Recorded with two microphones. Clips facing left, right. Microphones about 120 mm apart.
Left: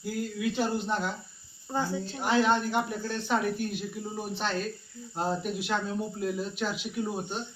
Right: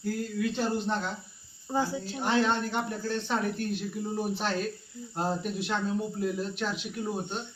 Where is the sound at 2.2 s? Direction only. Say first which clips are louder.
Left 2 dB; 10° left (ahead or behind).